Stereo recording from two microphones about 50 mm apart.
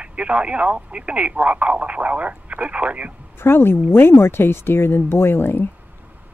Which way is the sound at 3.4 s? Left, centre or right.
Left.